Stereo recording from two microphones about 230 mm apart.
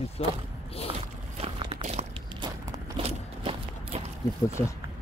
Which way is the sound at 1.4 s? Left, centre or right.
Right.